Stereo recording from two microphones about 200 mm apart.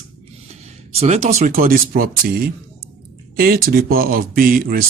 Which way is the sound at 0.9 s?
35° right (ahead or behind).